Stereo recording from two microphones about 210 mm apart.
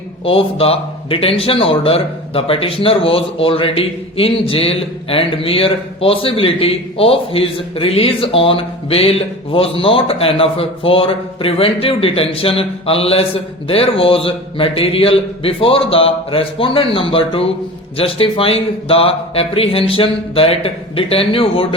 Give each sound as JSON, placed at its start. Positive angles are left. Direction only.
{"t": 0.3, "sound": "a man's voice", "side_deg": 25}